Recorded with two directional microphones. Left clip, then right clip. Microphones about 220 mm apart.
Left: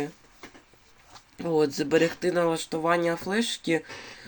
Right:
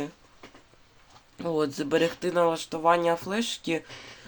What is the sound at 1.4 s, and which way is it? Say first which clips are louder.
Speech: left 3 dB; centre (ahead or behind).